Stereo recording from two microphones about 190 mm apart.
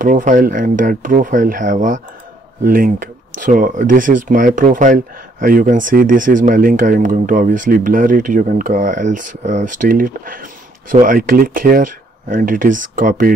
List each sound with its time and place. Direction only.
0.0 s speech: 45° right (ahead or behind)